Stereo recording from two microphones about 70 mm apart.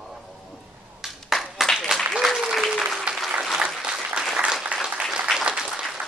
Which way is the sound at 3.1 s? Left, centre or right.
Centre.